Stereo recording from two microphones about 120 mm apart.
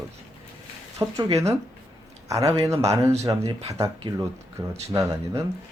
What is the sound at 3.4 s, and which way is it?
Speech, 50° right (ahead or behind).